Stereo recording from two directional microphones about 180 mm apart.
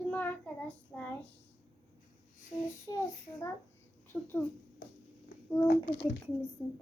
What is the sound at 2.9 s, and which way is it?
Speech, 20° left (ahead or behind).